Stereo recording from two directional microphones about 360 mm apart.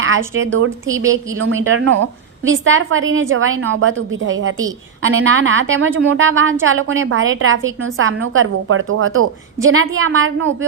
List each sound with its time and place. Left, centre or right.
0.3 s a woman's voice: right
0.9 s a woman's voice: centre
1.6 s a woman's voice: right